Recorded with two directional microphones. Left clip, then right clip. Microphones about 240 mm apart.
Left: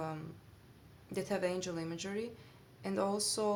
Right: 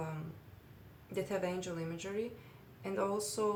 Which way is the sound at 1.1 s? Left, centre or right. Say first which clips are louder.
Left 1 dB; left.